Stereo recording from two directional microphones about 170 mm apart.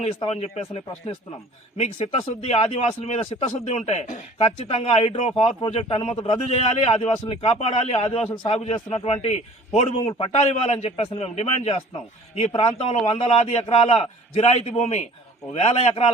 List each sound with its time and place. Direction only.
0.2 s a man's voice: 35° left (ahead or behind)